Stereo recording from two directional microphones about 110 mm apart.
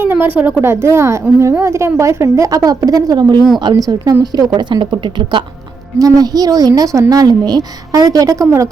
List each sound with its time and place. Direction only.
0.0 s a sound: 20° right (ahead or behind)
0.3 s a woman's voice: 15° right (ahead or behind); by 5.4 s 45° right (ahead or behind)
6.0 s a woman's voice: 35° right (ahead or behind)